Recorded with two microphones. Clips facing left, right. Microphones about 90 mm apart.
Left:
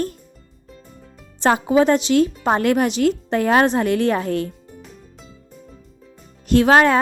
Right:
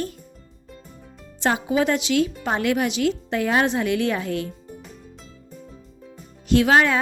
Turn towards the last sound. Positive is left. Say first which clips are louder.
# left 4 dB
turn(degrees=45)  # may be behind; listen again after turning